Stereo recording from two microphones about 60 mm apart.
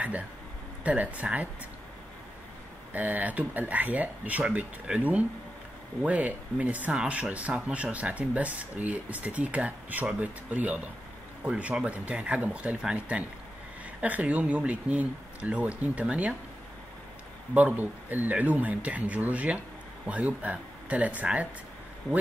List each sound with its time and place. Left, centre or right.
0.8 s speech: right
2.9 s speech: right
4.9 s speech: centre
14.0 s speech: right
17.6 s speech: right